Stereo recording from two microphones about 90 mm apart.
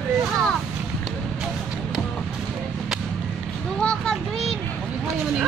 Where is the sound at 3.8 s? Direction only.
10° left (ahead or behind).